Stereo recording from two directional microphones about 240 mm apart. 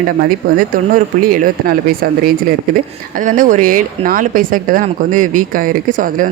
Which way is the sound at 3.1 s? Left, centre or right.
Right.